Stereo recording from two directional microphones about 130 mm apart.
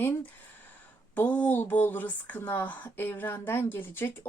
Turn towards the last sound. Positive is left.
turn(degrees=15)  # may be behind; listen again after turning